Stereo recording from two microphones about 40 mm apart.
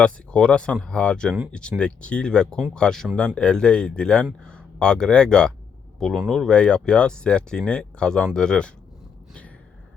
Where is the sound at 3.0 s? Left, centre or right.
Centre.